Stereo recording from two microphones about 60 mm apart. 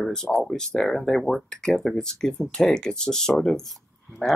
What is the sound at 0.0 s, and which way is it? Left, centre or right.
Speech, centre.